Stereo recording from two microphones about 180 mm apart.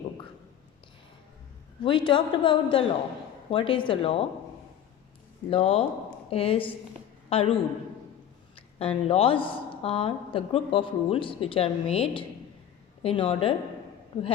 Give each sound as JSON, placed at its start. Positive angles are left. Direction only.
{"t": 1.8, "sound": "a woman's voice", "side_deg": 25}
{"t": 5.5, "sound": "a woman's voice", "side_deg": 35}